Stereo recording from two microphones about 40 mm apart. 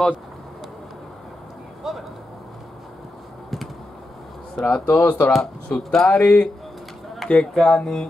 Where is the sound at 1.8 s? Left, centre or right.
Centre.